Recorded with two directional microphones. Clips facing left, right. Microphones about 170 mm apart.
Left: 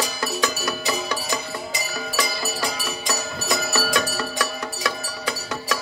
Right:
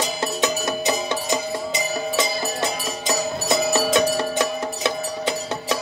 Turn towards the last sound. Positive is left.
turn(degrees=-25)  # may be behind; listen again after turning